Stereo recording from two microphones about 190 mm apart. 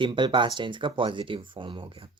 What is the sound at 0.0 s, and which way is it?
Speech, 25° right (ahead or behind).